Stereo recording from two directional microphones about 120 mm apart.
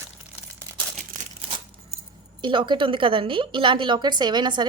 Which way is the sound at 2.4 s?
40° right (ahead or behind).